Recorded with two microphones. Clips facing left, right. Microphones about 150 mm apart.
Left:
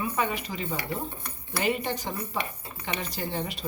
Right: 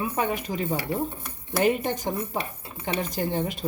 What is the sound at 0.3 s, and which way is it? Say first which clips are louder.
A woman's voice: right 5 dB; 50° right (ahead or behind).